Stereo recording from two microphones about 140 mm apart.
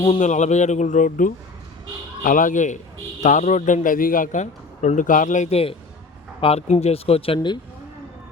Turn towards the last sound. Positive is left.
turn(degrees=35)  # may be behind; listen again after turning